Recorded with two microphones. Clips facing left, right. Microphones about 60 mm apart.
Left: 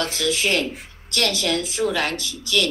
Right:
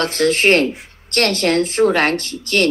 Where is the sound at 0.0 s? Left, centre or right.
Right.